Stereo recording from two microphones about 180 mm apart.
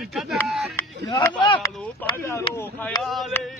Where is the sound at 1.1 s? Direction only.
25° left (ahead or behind).